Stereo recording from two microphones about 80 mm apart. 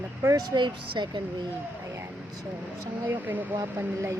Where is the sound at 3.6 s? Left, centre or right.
Right.